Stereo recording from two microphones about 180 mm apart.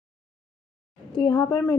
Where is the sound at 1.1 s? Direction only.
25° left (ahead or behind).